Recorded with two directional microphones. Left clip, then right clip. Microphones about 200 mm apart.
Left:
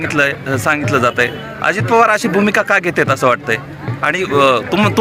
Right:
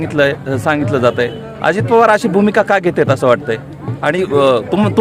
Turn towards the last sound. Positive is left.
turn(degrees=-25)  # may be behind; listen again after turning